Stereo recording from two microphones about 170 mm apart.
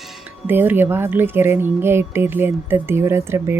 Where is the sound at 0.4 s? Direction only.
10° right (ahead or behind).